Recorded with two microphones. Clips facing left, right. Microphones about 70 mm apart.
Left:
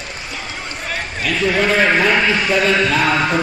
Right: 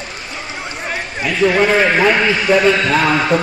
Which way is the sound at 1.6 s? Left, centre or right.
Centre.